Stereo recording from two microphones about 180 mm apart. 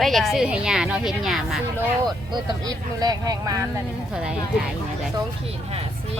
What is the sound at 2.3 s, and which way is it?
Speech, 20° right (ahead or behind).